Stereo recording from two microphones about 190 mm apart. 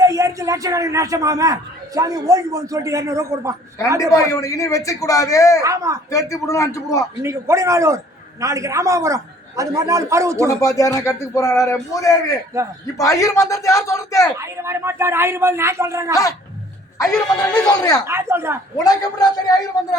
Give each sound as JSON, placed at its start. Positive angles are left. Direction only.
{"t": 0.0, "sound": "a man's voice", "side_deg": -15}
{"t": 4.1, "sound": "speech", "side_deg": 15}
{"t": 5.6, "sound": "a man's voice", "side_deg": -15}
{"t": 6.4, "sound": "speech", "side_deg": 15}
{"t": 7.2, "sound": "a man's voice", "side_deg": -15}
{"t": 10.5, "sound": "speech", "side_deg": 15}
{"t": 12.5, "sound": "a man's voice", "side_deg": -15}
{"t": 13.0, "sound": "speech", "side_deg": 15}
{"t": 14.3, "sound": "a man's voice", "side_deg": -15}
{"t": 17.0, "sound": "speech", "side_deg": 0}
{"t": 17.7, "sound": "a man's voice", "side_deg": 20}
{"t": 18.0, "sound": "a man's voice", "side_deg": -15}
{"t": 18.8, "sound": "a man's voice", "side_deg": 20}